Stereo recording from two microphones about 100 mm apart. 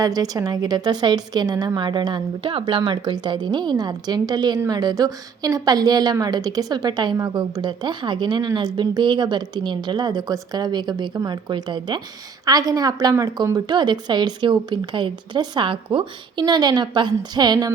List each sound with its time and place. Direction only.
0.0 s a woman's voice: 35° right (ahead or behind)
12.5 s a woman's voice: 40° right (ahead or behind); by 16.0 s 60° right (ahead or behind)
16.4 s a woman's voice: 45° right (ahead or behind)